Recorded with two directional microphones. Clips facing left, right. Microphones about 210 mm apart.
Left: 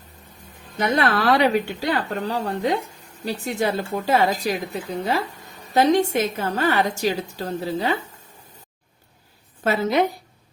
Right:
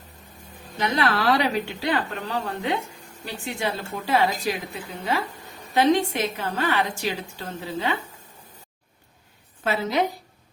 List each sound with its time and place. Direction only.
0.8 s a woman's voice: 50° left (ahead or behind)